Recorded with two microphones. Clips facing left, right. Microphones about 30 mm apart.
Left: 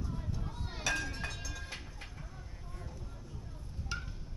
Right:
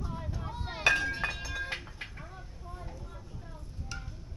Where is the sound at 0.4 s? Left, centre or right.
Right.